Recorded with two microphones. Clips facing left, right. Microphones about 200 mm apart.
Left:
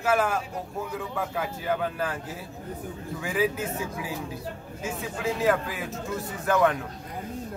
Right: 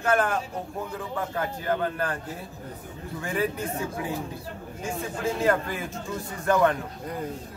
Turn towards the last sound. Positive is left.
turn(degrees=5)  # may be behind; listen again after turning